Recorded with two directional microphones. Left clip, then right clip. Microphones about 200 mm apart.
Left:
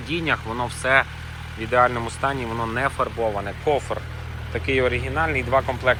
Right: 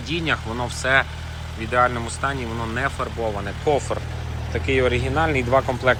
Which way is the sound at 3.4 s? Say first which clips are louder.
Right 1 dB; 15° right (ahead or behind).